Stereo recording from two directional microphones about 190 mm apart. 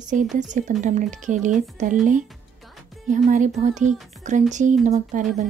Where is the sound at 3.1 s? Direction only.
40° right (ahead or behind).